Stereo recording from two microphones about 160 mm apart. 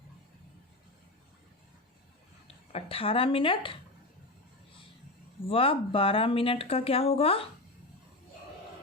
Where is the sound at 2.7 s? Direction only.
35° left (ahead or behind).